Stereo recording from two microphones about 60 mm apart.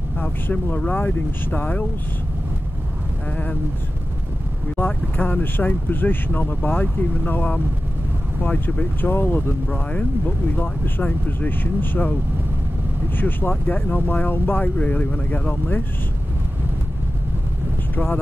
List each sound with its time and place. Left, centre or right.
0.2 s speech: left
4.7 s speech: left
9.7 s speech: left
13.2 s speech: left